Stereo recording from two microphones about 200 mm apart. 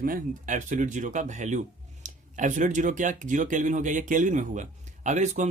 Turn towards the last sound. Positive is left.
turn(degrees=-35)  # may be behind; listen again after turning